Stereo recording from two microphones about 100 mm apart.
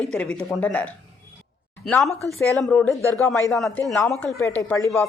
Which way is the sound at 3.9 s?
Centre (ahead or behind).